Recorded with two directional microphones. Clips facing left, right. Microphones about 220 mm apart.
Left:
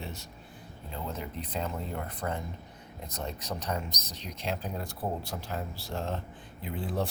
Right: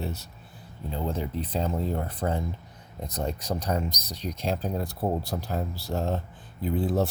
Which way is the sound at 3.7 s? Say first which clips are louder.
Right 6 dB; 35° right (ahead or behind).